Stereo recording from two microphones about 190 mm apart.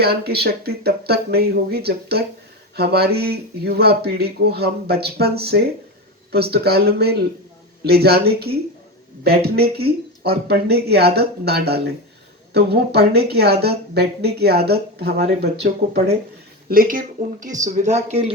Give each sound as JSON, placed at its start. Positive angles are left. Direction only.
{"t": 0.0, "sound": "a woman's voice", "side_deg": -55}
{"t": 16.6, "sound": "speech", "side_deg": -50}